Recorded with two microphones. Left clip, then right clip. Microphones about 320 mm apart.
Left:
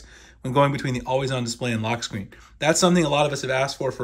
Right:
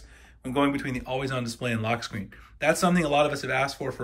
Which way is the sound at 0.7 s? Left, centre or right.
Centre.